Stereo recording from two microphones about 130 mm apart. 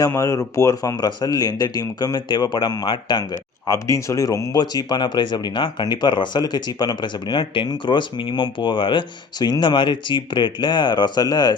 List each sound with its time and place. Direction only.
0.1 s speech: 25° left (ahead or behind)
3.7 s speech: 25° left (ahead or behind)